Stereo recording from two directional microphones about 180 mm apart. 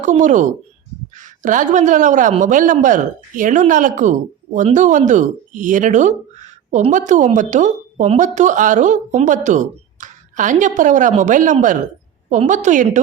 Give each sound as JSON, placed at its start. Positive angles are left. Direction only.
{"t": 0.0, "sound": "speech", "side_deg": -45}